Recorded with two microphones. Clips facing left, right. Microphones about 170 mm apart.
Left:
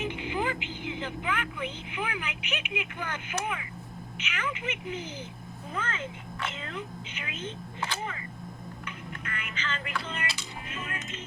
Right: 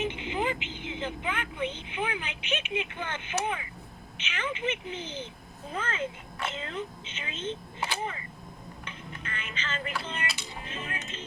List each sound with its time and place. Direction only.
0.0 s a woman's voice: 20° right (ahead or behind)
8.8 s speech: 25° right (ahead or behind)